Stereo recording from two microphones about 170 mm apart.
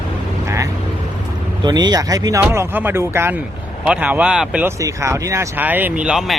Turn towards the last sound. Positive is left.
turn(degrees=-5)  # may be behind; listen again after turning